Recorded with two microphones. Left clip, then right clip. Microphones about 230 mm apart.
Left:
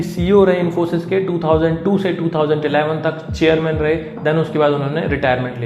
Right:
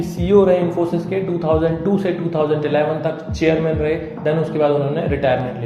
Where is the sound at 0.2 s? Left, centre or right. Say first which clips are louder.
Even; left.